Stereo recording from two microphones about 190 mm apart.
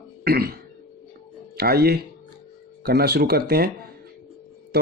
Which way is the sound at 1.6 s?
55° right (ahead or behind).